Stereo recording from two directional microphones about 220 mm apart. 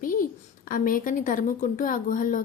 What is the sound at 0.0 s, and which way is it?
A woman's voice, 40° left (ahead or behind).